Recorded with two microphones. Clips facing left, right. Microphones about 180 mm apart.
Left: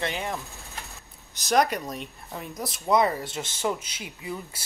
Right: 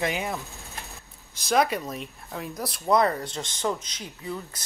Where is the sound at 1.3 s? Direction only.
Centre (ahead or behind).